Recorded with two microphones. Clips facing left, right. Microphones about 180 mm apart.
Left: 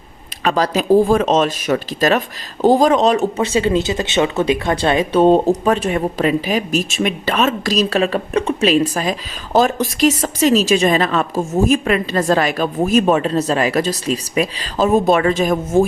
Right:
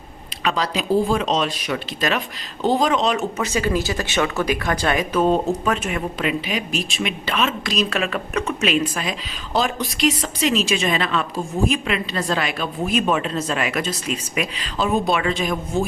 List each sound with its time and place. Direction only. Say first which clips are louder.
0.4 s speech: left 6 dB; 45° left (ahead or behind)